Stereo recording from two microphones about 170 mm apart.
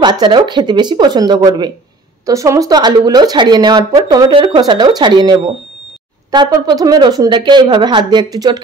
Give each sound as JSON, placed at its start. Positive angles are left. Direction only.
{"t": 0.0, "sound": "speech", "side_deg": -25}